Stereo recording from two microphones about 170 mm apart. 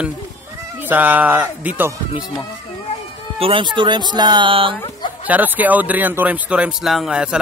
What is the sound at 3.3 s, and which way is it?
Speech, 30° right (ahead or behind).